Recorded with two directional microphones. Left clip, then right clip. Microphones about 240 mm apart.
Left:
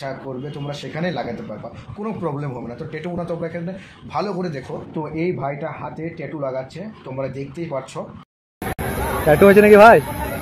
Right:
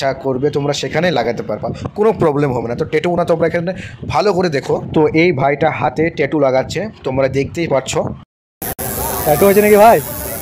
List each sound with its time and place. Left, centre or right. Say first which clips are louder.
0.0 s speech: right 13 dB; right
9.3 s speech: even; centre